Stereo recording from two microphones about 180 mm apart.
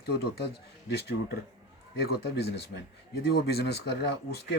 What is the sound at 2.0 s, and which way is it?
Speech, 65° left (ahead or behind).